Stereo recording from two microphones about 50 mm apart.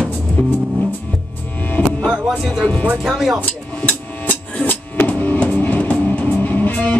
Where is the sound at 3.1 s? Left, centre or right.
Centre.